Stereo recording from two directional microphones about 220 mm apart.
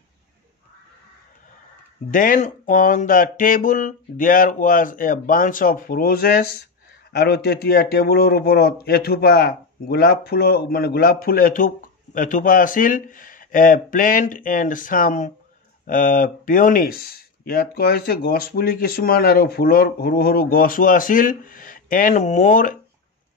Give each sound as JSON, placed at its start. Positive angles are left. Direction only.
{"t": 2.0, "sound": "a man's voice", "side_deg": 35}